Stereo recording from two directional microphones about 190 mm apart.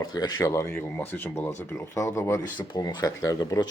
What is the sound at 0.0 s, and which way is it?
Speech, 20° left (ahead or behind).